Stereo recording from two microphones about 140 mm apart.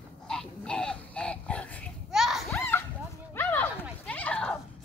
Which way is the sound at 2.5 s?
15° left (ahead or behind).